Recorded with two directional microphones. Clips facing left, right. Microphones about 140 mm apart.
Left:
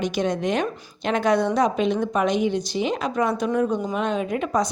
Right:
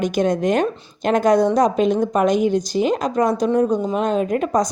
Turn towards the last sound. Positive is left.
turn(degrees=-45)  # may be behind; listen again after turning